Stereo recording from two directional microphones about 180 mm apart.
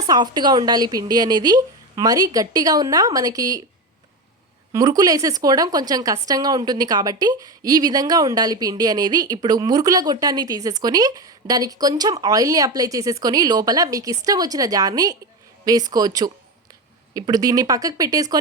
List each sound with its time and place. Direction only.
0.0 s speech: 20° right (ahead or behind)
4.7 s speech: 20° right (ahead or behind)